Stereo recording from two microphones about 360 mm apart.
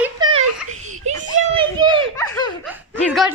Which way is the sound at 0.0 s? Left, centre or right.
Centre.